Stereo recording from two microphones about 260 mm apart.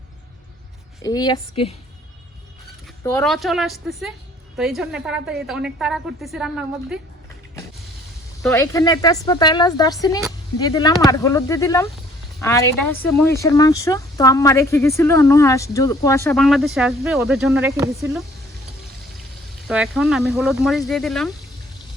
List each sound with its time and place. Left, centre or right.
1.0 s speech: centre
3.0 s speech: centre
3.2 s a woman's voice: centre
8.4 s speech: centre
19.6 s a woman's voice: centre